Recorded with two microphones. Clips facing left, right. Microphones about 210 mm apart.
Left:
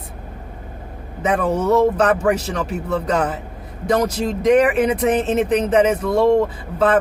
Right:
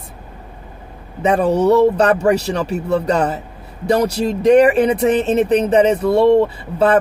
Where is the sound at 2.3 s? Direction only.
65° right (ahead or behind).